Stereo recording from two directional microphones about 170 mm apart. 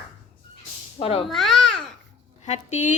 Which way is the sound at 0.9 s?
30° left (ahead or behind).